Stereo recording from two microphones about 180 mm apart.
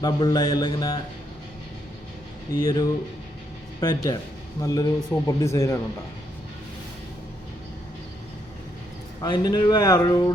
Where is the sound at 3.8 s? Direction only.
20° left (ahead or behind).